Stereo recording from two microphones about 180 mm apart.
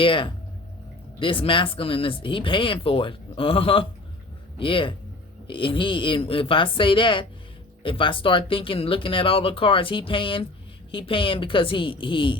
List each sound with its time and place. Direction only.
0.0 s speech: 30° left (ahead or behind)